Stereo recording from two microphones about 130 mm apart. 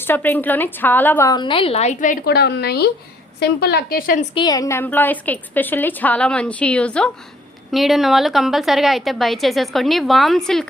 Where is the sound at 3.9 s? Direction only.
90° left.